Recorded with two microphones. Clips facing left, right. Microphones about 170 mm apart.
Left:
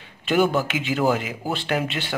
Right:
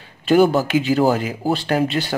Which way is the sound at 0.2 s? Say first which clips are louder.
Right 6 dB; 40° right (ahead or behind).